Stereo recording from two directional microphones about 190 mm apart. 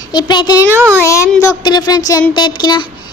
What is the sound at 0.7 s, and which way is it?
Speech, 10° right (ahead or behind).